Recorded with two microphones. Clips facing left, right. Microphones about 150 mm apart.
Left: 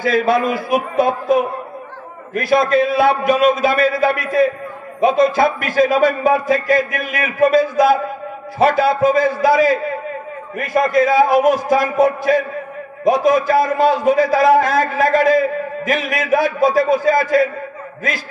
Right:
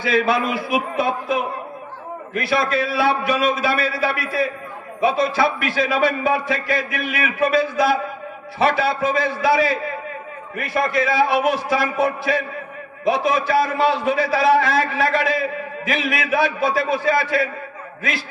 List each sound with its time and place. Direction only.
0.0 s a man's voice: 45° left (ahead or behind)